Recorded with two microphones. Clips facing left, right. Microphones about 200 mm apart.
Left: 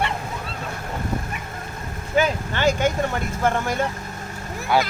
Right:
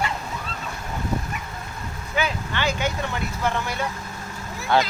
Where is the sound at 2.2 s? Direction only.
45° left (ahead or behind).